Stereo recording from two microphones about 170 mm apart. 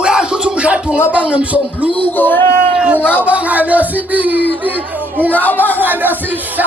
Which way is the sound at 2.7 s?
10° right (ahead or behind).